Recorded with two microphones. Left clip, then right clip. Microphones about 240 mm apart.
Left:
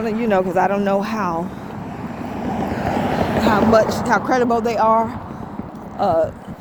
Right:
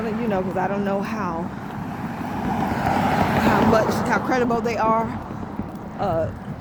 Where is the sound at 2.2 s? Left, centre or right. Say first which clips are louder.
Left 1 dB; right.